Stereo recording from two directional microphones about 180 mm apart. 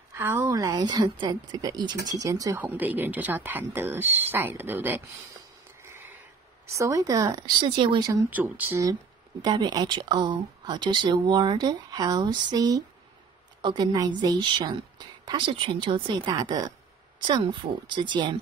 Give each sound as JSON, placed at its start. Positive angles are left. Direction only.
{"t": 0.1, "sound": "a woman's voice", "side_deg": -10}
{"t": 9.4, "sound": "speech", "side_deg": -25}